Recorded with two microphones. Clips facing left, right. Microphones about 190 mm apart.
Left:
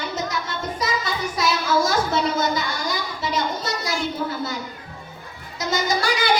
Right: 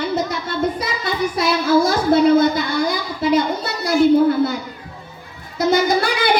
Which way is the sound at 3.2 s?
55° right (ahead or behind).